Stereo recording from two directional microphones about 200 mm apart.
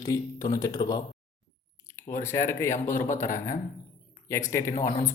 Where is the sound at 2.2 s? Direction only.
15° left (ahead or behind).